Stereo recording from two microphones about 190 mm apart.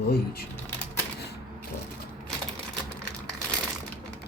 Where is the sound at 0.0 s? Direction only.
55° left (ahead or behind).